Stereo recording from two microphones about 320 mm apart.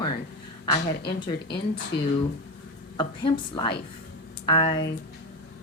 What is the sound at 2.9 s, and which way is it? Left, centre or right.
Speech, centre.